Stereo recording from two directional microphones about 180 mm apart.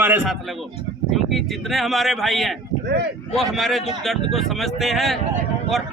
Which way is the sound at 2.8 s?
65° right (ahead or behind).